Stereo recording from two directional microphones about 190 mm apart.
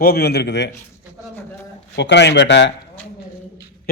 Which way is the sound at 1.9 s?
65° left (ahead or behind).